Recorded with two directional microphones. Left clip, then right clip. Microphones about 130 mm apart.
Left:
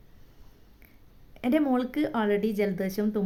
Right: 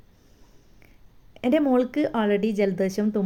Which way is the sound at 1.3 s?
30° right (ahead or behind).